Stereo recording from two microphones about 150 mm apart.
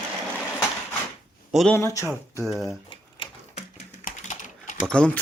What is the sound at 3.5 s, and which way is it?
Typing, 50° left (ahead or behind).